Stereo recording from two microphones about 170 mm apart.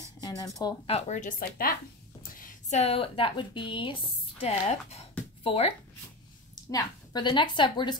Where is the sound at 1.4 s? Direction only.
60° left (ahead or behind).